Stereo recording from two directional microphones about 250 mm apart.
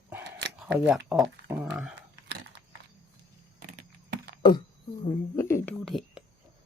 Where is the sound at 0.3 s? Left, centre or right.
Right.